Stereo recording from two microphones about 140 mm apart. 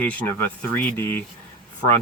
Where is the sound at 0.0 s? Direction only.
10° left (ahead or behind).